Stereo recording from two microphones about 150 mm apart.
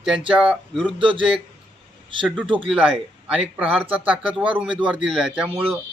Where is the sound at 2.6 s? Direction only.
5° right (ahead or behind).